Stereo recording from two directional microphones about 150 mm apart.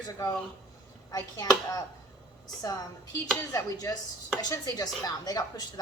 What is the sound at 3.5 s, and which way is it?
A woman's voice, 25° left (ahead or behind).